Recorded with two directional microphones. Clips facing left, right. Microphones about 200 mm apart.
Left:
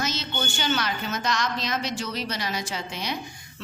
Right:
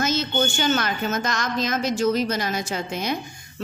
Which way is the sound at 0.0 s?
50° right (ahead or behind).